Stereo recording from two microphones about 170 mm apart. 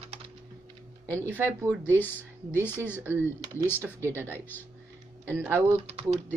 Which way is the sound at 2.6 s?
15° left (ahead or behind).